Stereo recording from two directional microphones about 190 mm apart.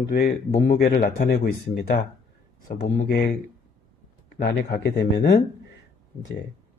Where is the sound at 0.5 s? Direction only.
35° left (ahead or behind).